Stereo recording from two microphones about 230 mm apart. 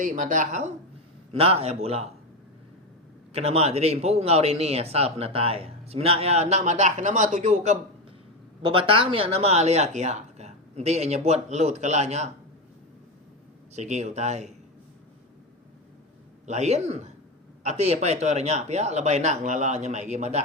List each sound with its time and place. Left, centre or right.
0.0 s a woman's voice: right
3.3 s speech: right
13.7 s speech: right
16.5 s speech: right